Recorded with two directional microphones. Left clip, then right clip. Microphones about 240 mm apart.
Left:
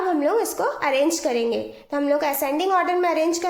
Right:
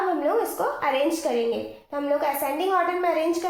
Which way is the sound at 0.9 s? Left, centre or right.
Left.